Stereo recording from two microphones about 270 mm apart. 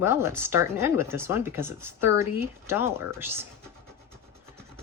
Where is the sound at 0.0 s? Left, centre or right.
Centre.